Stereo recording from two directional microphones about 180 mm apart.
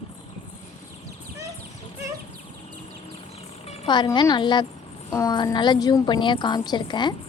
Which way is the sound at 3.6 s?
35° left (ahead or behind).